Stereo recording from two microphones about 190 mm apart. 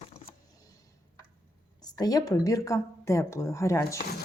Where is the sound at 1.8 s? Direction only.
20° left (ahead or behind).